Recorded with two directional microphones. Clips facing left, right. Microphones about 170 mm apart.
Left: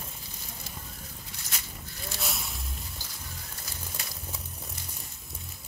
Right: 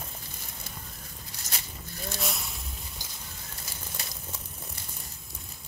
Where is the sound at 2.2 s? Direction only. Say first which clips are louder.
Even; centre (ahead or behind).